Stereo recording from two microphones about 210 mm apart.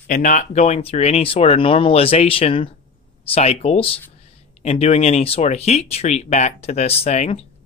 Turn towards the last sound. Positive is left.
turn(degrees=30)  # may be behind; listen again after turning